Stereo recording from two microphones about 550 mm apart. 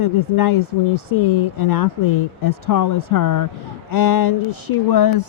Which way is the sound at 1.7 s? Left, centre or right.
Left.